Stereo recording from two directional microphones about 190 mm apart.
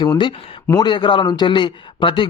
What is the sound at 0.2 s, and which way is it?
Speech, 20° left (ahead or behind).